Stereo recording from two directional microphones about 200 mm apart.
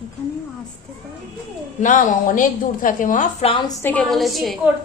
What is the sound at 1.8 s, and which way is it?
A man's voice, 40° left (ahead or behind).